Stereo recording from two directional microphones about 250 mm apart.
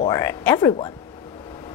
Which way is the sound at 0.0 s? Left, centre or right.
Centre.